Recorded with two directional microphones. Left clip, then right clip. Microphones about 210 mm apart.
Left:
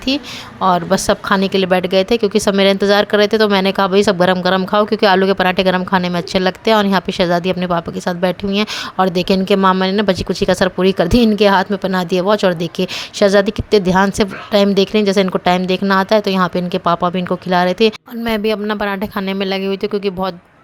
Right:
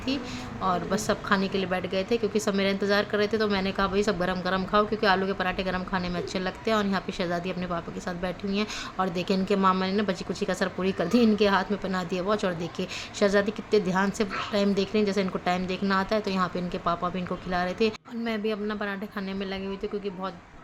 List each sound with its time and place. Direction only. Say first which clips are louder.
0.6 s a woman's voice: left 13 dB; 45° left (ahead or behind)